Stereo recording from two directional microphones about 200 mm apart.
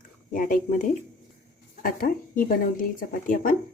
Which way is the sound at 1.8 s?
45° left (ahead or behind).